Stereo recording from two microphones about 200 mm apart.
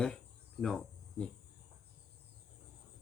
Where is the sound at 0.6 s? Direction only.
5° left (ahead or behind).